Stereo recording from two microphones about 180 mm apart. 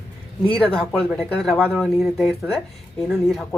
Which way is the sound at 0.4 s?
30° left (ahead or behind).